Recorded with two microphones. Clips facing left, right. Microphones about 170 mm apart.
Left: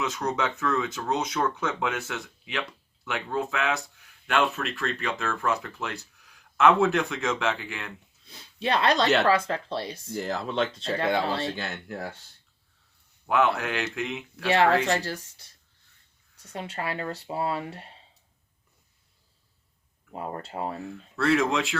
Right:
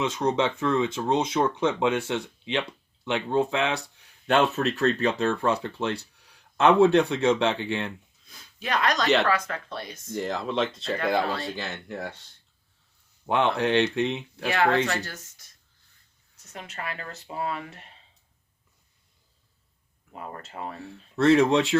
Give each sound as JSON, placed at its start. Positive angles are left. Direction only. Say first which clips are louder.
{"t": 0.0, "sound": "speech", "louder": "right 4 dB", "side_deg": -30}
{"t": 8.3, "sound": "speech", "louder": "left 3 dB", "side_deg": 30}
{"t": 10.1, "sound": "speech", "louder": "right 3 dB", "side_deg": 5}
{"t": 13.2, "sound": "speech", "louder": "right 1 dB", "side_deg": -30}
{"t": 14.4, "sound": "speech", "louder": "left 2 dB", "side_deg": 30}
{"t": 20.1, "sound": "speech", "louder": "left 4 dB", "side_deg": 30}
{"t": 20.8, "sound": "speech", "louder": "right 7 dB", "side_deg": -30}